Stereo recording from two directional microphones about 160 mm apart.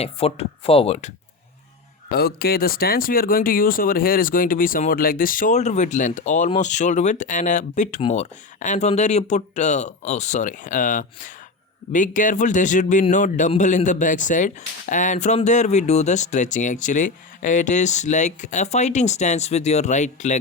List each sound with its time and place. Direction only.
0.0 s speech: 40° left (ahead or behind)
2.0 s speech: 75° left (ahead or behind); by 20.3 s 50° left (ahead or behind)